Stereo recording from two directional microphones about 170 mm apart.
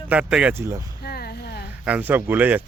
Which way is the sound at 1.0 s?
65° left (ahead or behind).